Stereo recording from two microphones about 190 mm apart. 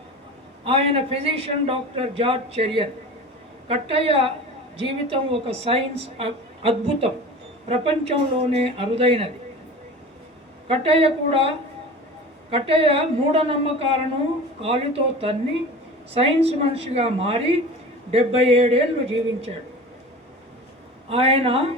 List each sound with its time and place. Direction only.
0.6 s a woman's voice: 30° right (ahead or behind)
10.7 s a woman's voice: 30° right (ahead or behind)
21.1 s a man's voice: 30° right (ahead or behind)